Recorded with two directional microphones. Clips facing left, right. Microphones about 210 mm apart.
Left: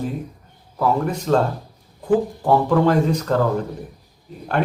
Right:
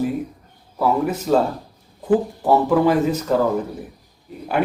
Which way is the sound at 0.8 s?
5° right (ahead or behind).